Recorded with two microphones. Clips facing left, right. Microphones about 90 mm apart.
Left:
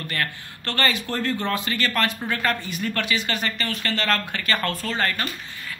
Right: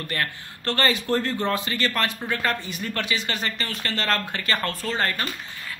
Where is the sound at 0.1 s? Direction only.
25° right (ahead or behind).